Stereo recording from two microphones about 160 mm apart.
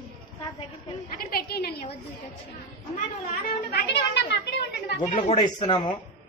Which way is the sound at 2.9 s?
70° left (ahead or behind).